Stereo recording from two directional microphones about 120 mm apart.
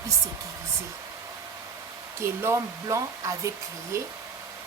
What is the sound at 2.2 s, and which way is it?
A woman's voice, 20° right (ahead or behind).